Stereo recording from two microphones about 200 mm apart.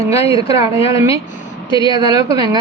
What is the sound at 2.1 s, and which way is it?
Speech, 20° right (ahead or behind).